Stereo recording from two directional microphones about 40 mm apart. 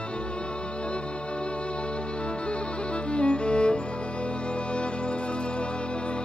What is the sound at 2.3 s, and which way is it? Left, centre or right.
Music, left.